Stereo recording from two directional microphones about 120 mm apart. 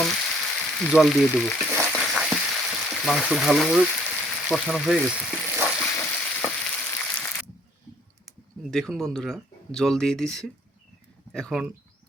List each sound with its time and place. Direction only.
0.0 s frying: 5° left (ahead or behind)
0.9 s speech: centre (ahead or behind)
1.8 s a sound: 5° left (ahead or behind)
2.1 s frying: centre (ahead or behind)
3.8 s frying: 10° left (ahead or behind)
4.6 s speech: 5° left (ahead or behind)
5.7 s frying: 20° left (ahead or behind)
8.7 s speech: 5° left (ahead or behind)